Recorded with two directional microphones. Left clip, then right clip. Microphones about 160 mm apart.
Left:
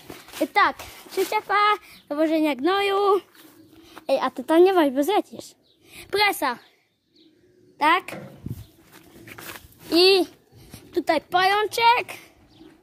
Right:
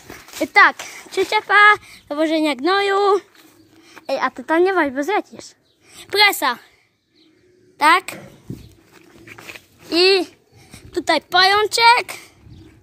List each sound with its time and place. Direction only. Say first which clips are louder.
0.5 s a woman's voice: right 8 dB; 20° right (ahead or behind)
1.8 s speech: right 3 dB; 5° right (ahead or behind)
4.0 s a woman's voice: right 2 dB; 15° left (ahead or behind)
5.9 s a woman's voice: right 6 dB; 5° right (ahead or behind)
7.7 s a child's voice: right 6 dB; 15° right (ahead or behind)
8.9 s a sound: right 2 dB; 30° right (ahead or behind)
9.9 s a sound: right 2 dB; 5° left (ahead or behind)
11.1 s a woman's voice: right 6 dB; 20° right (ahead or behind)